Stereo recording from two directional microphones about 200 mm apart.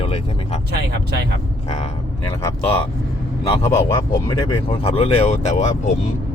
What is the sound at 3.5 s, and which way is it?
Speech, 15° left (ahead or behind).